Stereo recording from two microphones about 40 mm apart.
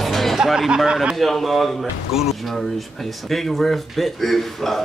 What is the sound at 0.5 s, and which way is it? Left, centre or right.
Speech, centre.